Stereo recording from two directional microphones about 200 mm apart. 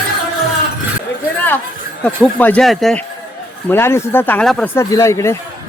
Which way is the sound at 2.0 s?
10° left (ahead or behind).